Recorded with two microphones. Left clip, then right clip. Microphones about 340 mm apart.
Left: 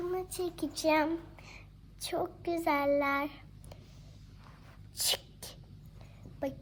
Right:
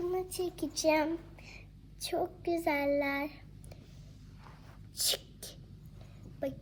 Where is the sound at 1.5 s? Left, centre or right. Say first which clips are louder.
Even; left.